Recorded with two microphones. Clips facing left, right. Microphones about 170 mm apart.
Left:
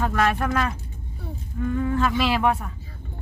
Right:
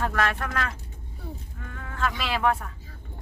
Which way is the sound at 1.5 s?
10° left (ahead or behind).